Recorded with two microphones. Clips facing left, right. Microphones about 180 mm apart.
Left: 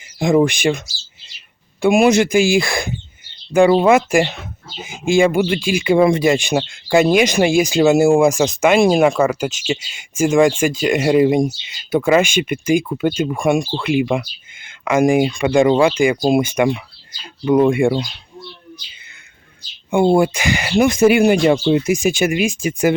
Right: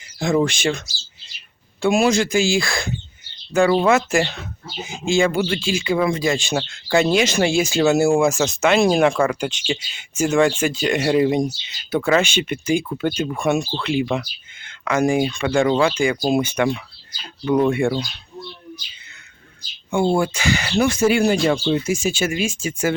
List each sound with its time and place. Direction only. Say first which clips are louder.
0.2 s speech: left 5 dB; 15° left (ahead or behind)
5.4 s speech: left 4 dB; 10° left (ahead or behind)
19.9 s speech: left 5 dB; 15° left (ahead or behind)